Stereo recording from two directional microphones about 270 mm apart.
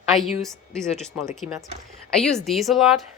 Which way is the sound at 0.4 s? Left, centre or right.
Centre.